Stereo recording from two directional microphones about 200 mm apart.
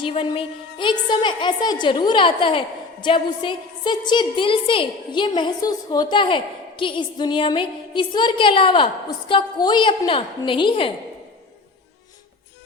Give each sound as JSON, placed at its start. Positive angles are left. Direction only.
{"t": 0.0, "sound": "a woman's voice", "side_deg": 25}